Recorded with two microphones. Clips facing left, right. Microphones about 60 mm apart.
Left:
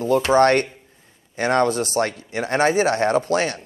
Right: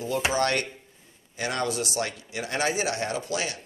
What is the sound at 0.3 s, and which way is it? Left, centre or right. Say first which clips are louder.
Speech: left 13 dB; left.